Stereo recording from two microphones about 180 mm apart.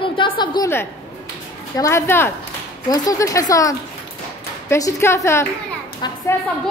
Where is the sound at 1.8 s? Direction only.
15° left (ahead or behind).